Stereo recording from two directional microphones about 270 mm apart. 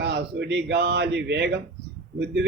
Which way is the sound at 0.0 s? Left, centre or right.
Right.